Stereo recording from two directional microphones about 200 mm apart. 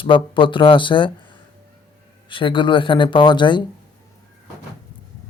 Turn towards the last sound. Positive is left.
turn(degrees=25)  # may be behind; listen again after turning